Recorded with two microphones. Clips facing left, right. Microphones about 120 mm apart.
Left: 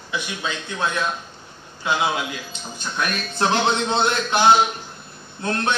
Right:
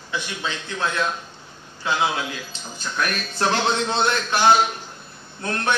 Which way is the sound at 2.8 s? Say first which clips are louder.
Even; 20° left (ahead or behind).